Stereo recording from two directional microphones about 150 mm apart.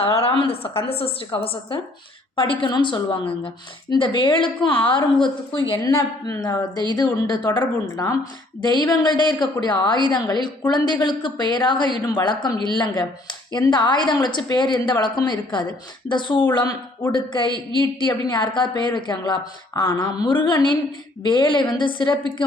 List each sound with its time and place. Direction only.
0.0 s a woman's voice: 40° left (ahead or behind)